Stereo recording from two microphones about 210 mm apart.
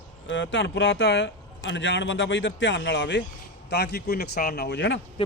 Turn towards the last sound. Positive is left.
turn(degrees=55)  # may be behind; listen again after turning